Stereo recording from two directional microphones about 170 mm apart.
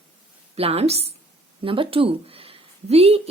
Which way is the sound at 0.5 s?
35° right (ahead or behind).